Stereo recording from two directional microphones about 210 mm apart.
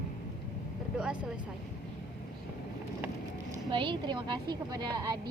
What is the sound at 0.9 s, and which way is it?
Vehicle, 5° right (ahead or behind).